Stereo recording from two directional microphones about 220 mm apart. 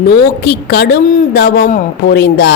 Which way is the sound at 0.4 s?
50° left (ahead or behind).